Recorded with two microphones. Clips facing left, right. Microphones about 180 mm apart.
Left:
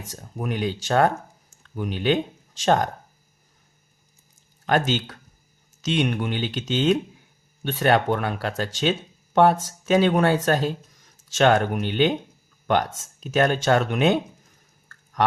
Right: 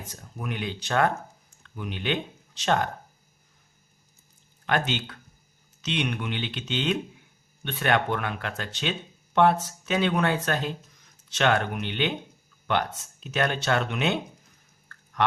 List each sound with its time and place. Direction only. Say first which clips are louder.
0.2 s speech: left 7 dB; 40° left (ahead or behind)
4.7 s speech: left 5 dB; 40° left (ahead or behind)